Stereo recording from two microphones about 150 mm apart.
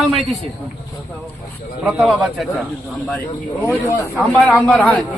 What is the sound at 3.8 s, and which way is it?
Speech, 15° left (ahead or behind).